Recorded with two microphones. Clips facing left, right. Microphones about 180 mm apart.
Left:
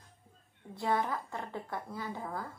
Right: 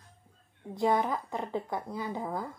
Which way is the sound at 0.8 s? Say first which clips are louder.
Right 5 dB; 20° right (ahead or behind).